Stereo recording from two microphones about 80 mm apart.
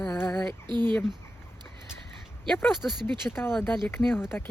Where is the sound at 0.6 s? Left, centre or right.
Right.